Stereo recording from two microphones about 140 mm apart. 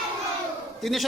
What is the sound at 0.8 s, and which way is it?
Speech, centre (ahead or behind).